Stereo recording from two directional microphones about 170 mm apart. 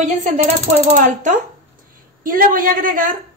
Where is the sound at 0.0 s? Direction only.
45° right (ahead or behind).